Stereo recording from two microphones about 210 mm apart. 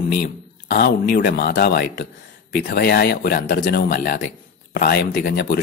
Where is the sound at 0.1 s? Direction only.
45° left (ahead or behind).